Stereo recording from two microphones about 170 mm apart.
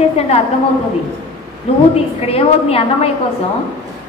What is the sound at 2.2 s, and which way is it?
Speech, 35° left (ahead or behind).